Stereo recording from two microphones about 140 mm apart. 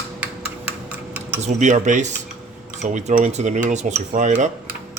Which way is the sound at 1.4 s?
60° right (ahead or behind).